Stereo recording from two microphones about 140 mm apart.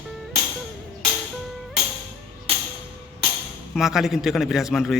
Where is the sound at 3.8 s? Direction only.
Centre (ahead or behind).